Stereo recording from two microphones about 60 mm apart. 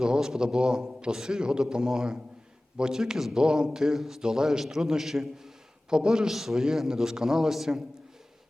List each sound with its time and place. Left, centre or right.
0.0 s a man's voice: centre